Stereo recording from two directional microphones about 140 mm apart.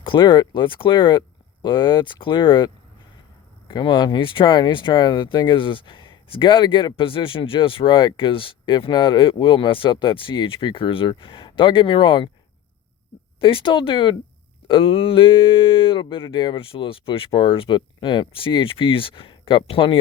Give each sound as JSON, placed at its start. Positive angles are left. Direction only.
{"t": 0.0, "sound": "speech", "side_deg": 35}
{"t": 13.4, "sound": "speech", "side_deg": 35}